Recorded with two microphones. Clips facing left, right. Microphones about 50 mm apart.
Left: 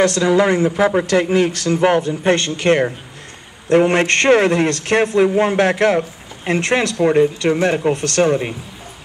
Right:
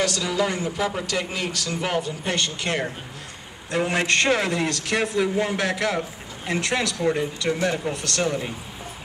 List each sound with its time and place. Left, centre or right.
0.0 s a man's voice: left